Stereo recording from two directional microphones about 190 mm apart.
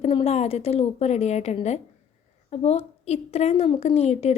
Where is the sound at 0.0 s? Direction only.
30° left (ahead or behind).